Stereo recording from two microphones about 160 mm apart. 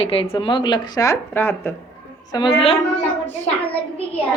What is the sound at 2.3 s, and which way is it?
Speech, 35° left (ahead or behind).